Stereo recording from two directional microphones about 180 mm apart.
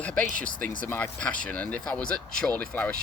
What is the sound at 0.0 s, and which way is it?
Speech, 5° left (ahead or behind).